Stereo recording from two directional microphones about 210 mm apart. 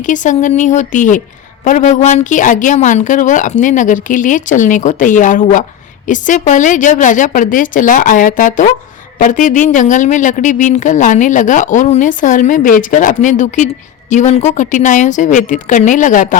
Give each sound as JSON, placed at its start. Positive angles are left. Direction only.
{"t": 0.0, "sound": "speech", "side_deg": 35}